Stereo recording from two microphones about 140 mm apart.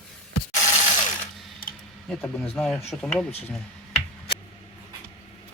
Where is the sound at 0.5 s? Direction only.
55° left (ahead or behind).